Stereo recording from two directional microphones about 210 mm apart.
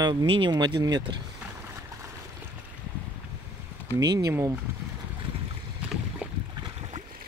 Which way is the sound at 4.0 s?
15° right (ahead or behind).